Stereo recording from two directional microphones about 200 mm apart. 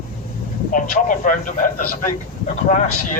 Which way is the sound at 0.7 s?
40° left (ahead or behind).